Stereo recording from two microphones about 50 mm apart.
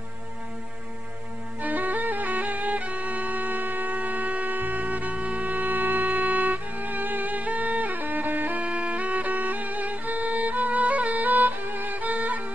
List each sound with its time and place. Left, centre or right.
1.6 s music: right
8.6 s music: right